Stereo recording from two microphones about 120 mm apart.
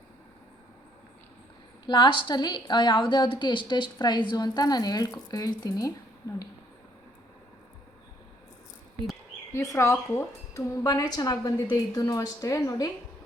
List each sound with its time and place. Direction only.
1.9 s speech: 40° left (ahead or behind)
9.5 s a woman's voice: 25° left (ahead or behind)